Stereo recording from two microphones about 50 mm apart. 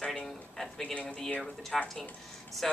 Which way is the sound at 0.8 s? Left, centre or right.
Left.